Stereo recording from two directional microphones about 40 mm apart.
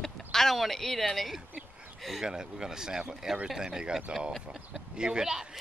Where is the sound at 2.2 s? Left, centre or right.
Centre.